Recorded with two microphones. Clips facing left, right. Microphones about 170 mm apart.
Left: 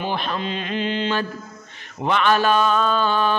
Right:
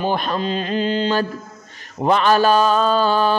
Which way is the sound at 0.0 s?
40° right (ahead or behind).